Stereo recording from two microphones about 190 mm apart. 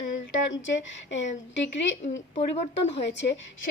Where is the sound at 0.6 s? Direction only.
75° left (ahead or behind).